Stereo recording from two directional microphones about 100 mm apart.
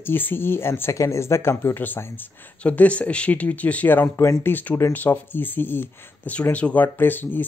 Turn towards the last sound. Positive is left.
turn(degrees=20)  # may be behind; listen again after turning